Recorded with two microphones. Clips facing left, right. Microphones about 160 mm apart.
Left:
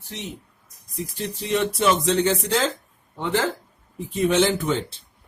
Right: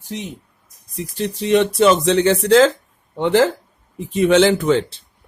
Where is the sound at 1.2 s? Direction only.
85° right.